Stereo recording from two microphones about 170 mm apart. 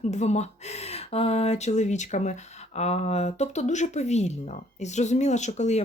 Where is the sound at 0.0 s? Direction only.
40° left (ahead or behind).